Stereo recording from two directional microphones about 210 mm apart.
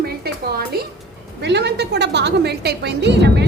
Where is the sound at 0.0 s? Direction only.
50° right (ahead or behind).